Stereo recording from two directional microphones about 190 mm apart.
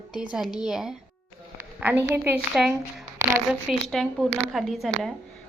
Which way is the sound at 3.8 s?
Centre (ahead or behind).